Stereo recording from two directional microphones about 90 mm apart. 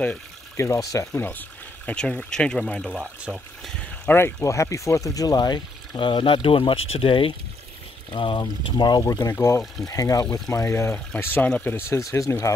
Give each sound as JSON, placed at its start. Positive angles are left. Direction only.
{"t": 0.6, "sound": "speech", "side_deg": 35}
{"t": 1.9, "sound": "speech", "side_deg": 10}
{"t": 2.8, "sound": "speech", "side_deg": -10}
{"t": 4.4, "sound": "speech", "side_deg": 35}
{"t": 8.1, "sound": "speech", "side_deg": 65}
{"t": 9.3, "sound": "speech", "side_deg": 30}